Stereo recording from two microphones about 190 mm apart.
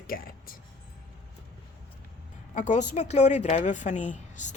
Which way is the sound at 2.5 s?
40° left (ahead or behind).